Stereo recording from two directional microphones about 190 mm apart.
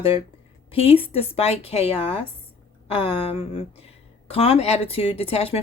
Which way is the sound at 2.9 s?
30° left (ahead or behind).